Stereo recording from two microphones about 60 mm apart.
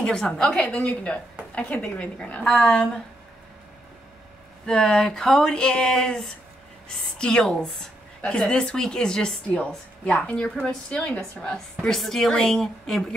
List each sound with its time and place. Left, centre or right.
0.0 s speech: centre
0.7 s a woman's voice: left
4.6 s a woman's voice: centre